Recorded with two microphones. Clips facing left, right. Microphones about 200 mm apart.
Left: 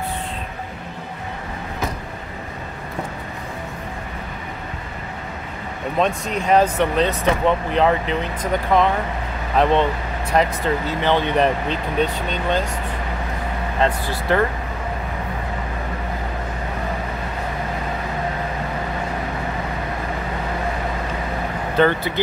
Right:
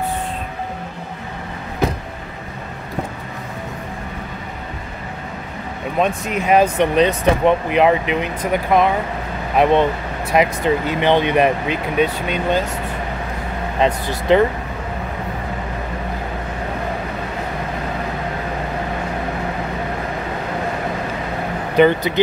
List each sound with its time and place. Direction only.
5.9 s speech: 10° right (ahead or behind)
13.7 s speech: 20° right (ahead or behind)
21.7 s speech: 15° right (ahead or behind)